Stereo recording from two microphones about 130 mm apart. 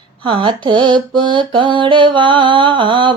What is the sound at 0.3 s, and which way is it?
Mantra, 40° right (ahead or behind).